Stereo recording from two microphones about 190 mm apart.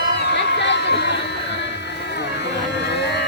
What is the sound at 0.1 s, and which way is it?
Music, 65° left (ahead or behind).